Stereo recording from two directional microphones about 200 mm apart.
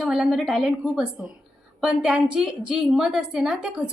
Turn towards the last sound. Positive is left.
turn(degrees=-5)  # may be behind; listen again after turning